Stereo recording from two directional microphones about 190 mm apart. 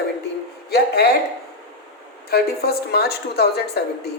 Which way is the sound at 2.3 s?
55° left (ahead or behind).